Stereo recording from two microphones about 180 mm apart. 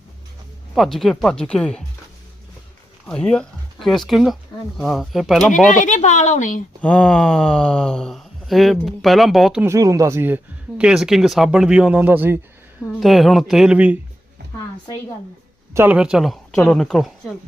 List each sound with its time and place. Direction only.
0.7 s speech: centre (ahead or behind)
3.1 s speech: 5° left (ahead or behind)
5.6 s a woman's voice: 45° left (ahead or behind)
6.8 s speech: 5° left (ahead or behind); by 12.4 s 10° right (ahead or behind)
13.0 s speech: centre (ahead or behind)
15.7 s speech: 10° right (ahead or behind)